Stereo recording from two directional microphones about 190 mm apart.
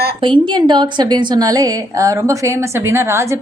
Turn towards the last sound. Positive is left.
turn(degrees=-15)  # may be behind; listen again after turning